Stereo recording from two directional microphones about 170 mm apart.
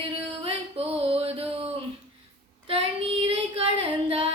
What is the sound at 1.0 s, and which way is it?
Music, 35° right (ahead or behind).